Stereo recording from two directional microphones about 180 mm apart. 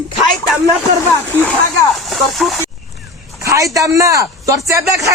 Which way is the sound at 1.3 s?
10° left (ahead or behind).